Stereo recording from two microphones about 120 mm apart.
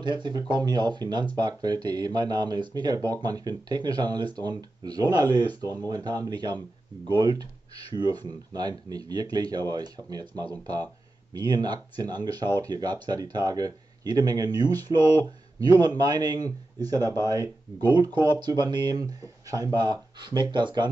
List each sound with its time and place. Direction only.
0.0 s speech: 40° right (ahead or behind)